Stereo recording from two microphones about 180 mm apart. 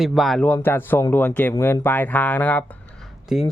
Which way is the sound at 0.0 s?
Centre (ahead or behind).